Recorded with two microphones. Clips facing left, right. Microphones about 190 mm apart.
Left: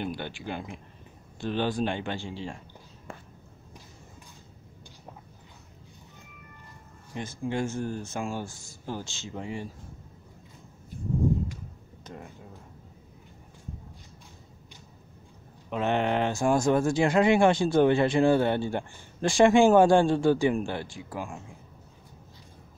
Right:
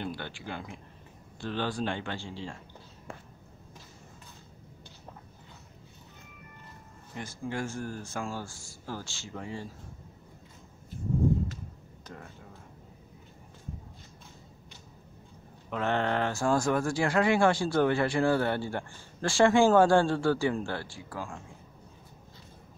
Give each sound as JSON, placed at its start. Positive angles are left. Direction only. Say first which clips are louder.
{"t": 0.0, "sound": "speech", "louder": "left 3 dB", "side_deg": 15}
{"t": 7.2, "sound": "speech", "louder": "left 4 dB", "side_deg": 20}
{"t": 12.1, "sound": "a sound", "louder": "left 3 dB", "side_deg": 20}
{"t": 15.7, "sound": "speech", "louder": "left 3 dB", "side_deg": 20}